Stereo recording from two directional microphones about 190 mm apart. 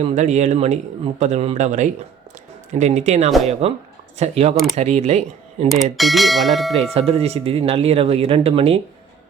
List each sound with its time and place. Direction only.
0.0 s speech: 35° right (ahead or behind)
6.0 s speech: centre (ahead or behind)
7.1 s speech: 30° right (ahead or behind)